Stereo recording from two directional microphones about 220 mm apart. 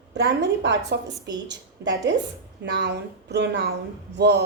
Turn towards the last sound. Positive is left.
turn(degrees=-50)  # may be behind; listen again after turning